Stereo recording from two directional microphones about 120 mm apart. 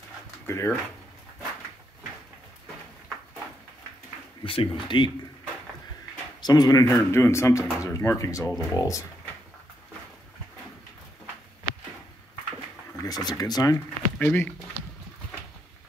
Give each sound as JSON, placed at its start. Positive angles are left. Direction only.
{"t": 0.5, "sound": "speech", "side_deg": 20}
{"t": 4.4, "sound": "speech", "side_deg": 45}
{"t": 6.4, "sound": "speech", "side_deg": 35}
{"t": 12.9, "sound": "speech", "side_deg": 30}
{"t": 14.1, "sound": "speech", "side_deg": 15}